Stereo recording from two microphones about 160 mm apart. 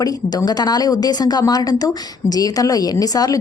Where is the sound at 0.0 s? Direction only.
25° left (ahead or behind).